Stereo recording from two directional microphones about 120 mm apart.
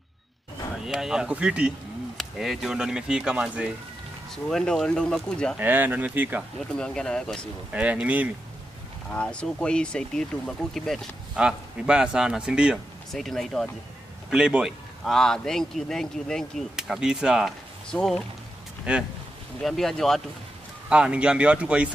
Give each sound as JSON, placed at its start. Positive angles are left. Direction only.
{"t": 0.8, "sound": "speech", "side_deg": -5}
{"t": 4.5, "sound": "speech", "side_deg": 5}
{"t": 5.6, "sound": "speech", "side_deg": -15}
{"t": 6.8, "sound": "speech", "side_deg": 5}
{"t": 7.7, "sound": "speech", "side_deg": -10}
{"t": 9.1, "sound": "speech", "side_deg": 10}
{"t": 11.3, "sound": "speech", "side_deg": -10}
{"t": 15.1, "sound": "speech", "side_deg": 5}
{"t": 17.8, "sound": "speech", "side_deg": 5}
{"t": 18.9, "sound": "speech", "side_deg": -10}
{"t": 19.6, "sound": "speech", "side_deg": 0}
{"t": 20.9, "sound": "speech", "side_deg": -10}